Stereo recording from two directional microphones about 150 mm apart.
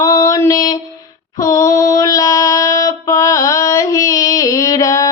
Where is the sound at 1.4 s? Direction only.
20° left (ahead or behind).